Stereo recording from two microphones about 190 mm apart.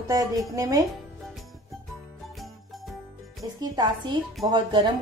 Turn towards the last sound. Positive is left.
turn(degrees=-25)  # may be behind; listen again after turning